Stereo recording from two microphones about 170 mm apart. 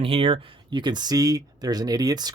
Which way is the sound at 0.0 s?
35° right (ahead or behind).